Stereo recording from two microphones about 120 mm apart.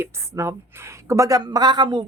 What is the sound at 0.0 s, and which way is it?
Speech, 20° right (ahead or behind).